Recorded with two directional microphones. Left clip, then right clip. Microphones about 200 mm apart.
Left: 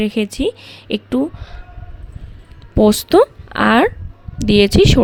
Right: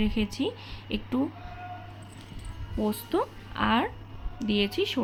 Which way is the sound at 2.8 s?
60° left (ahead or behind).